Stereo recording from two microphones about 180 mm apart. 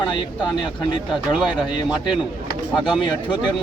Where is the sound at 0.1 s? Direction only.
25° left (ahead or behind).